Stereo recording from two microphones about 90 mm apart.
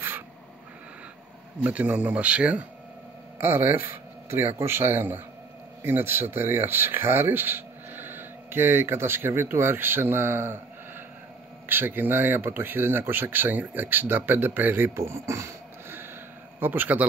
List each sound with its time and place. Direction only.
1.6 s speech: 15° right (ahead or behind)
3.3 s speech: 25° right (ahead or behind)
11.6 s speech: 20° right (ahead or behind)